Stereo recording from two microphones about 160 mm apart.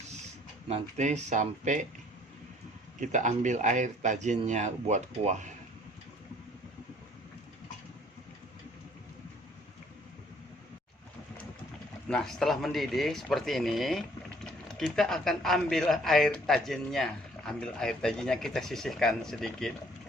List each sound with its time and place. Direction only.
0.7 s speech: 45° right (ahead or behind)
3.0 s speech: 50° right (ahead or behind)
12.0 s speech: 5° left (ahead or behind)